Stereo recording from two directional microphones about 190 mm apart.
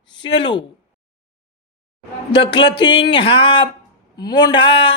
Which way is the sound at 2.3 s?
25° left (ahead or behind).